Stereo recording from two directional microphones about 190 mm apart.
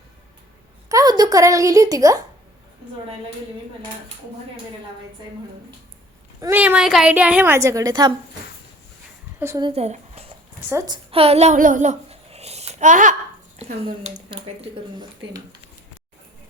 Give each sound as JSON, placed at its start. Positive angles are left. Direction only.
{"t": 0.9, "sound": "a woman's voice", "side_deg": -20}
{"t": 6.4, "sound": "a woman's voice", "side_deg": -10}
{"t": 9.4, "sound": "a woman's voice", "side_deg": -15}
{"t": 9.6, "sound": "speech", "side_deg": -35}
{"t": 10.7, "sound": "a woman's voice", "side_deg": -20}